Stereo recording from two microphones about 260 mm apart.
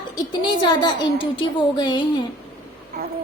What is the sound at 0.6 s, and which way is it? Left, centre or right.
A woman's voice, centre.